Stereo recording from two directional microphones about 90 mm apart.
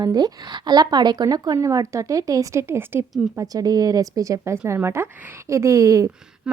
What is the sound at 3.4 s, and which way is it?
A woman's voice, 45° right (ahead or behind).